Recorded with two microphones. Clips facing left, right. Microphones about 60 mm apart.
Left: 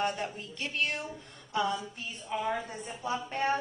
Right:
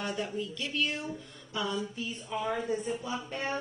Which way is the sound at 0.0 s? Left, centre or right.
Left.